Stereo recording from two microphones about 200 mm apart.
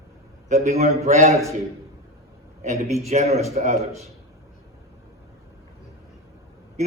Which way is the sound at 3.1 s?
30° right (ahead or behind).